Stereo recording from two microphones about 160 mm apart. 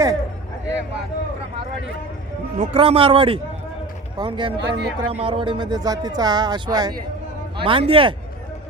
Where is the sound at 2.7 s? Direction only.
35° right (ahead or behind).